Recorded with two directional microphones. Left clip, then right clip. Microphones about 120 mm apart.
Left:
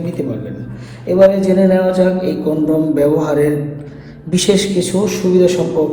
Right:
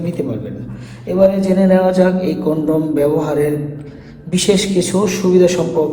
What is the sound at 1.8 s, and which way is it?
Speech, 40° right (ahead or behind).